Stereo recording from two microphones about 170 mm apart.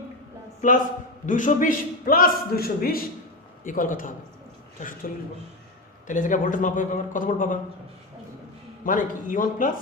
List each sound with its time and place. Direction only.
1.3 s a man's voice: 50° left (ahead or behind)
6.1 s speech: 50° left (ahead or behind)
8.8 s speech: 50° left (ahead or behind)